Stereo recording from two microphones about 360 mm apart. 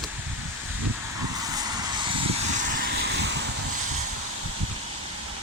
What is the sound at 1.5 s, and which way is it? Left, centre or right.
Vehicle, centre.